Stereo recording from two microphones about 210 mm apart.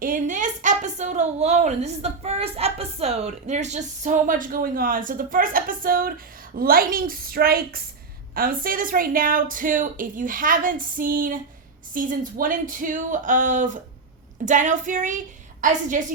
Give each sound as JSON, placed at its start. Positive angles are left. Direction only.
{"t": 0.0, "sound": "a woman's voice", "side_deg": -40}